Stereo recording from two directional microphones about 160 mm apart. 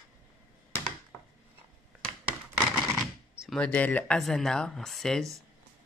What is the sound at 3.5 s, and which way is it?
Speech, 10° left (ahead or behind).